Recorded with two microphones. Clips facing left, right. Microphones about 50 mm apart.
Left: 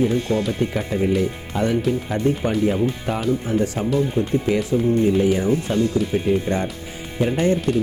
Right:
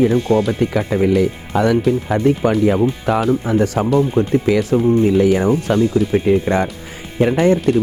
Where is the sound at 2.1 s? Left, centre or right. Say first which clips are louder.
Right 6 dB; right.